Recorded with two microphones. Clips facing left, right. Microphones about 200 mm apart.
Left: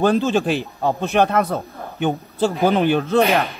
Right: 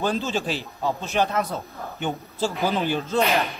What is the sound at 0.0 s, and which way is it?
A man's voice, 55° left (ahead or behind).